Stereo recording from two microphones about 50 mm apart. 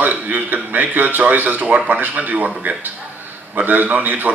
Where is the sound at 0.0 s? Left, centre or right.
Right.